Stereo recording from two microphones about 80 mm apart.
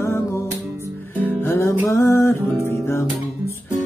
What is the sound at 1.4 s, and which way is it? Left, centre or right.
Music, left.